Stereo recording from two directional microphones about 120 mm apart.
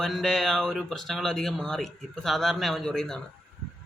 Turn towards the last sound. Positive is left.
turn(degrees=5)  # may be behind; listen again after turning